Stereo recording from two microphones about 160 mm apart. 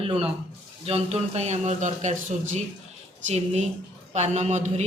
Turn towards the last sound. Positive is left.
turn(degrees=-45)  # may be behind; listen again after turning